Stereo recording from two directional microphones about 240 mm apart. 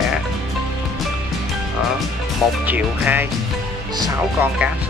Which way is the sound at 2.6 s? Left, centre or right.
Centre.